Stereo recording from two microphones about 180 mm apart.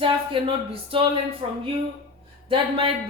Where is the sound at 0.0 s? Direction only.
30° right (ahead or behind).